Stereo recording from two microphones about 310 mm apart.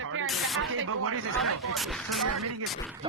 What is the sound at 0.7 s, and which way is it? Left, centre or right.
Speech, right.